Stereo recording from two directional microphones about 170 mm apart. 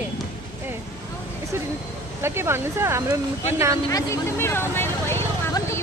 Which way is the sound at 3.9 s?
15° left (ahead or behind).